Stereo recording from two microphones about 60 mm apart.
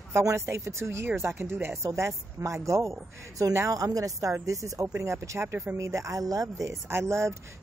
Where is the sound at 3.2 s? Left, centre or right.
Right.